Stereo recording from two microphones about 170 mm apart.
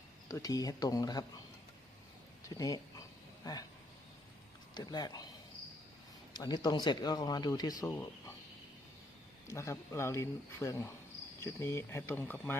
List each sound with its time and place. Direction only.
0.3 s speech: 20° left (ahead or behind)
2.6 s speech: 20° left (ahead or behind)
4.7 s speech: 25° left (ahead or behind)
6.3 s speech: 25° left (ahead or behind)
9.5 s speech: 15° left (ahead or behind)